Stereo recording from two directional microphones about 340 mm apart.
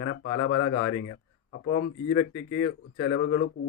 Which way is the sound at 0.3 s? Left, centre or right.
Left.